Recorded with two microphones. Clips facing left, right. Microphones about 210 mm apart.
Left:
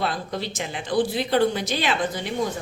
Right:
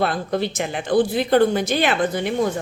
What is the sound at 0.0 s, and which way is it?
A woman's voice, 55° right (ahead or behind).